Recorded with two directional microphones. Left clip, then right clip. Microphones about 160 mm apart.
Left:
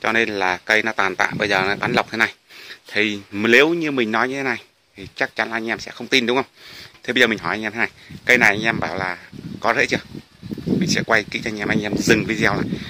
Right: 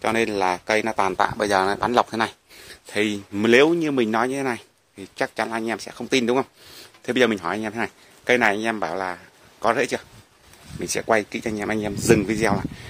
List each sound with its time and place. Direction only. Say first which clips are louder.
0.0 s speech: left 2 dB; 10° right (ahead or behind)
10.8 s speech: left 2 dB; 20° right (ahead or behind)